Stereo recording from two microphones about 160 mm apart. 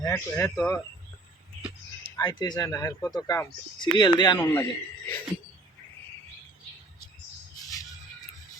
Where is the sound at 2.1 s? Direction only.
25° left (ahead or behind).